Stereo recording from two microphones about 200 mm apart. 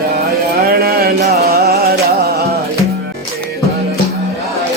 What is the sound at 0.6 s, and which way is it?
Music, 50° right (ahead or behind).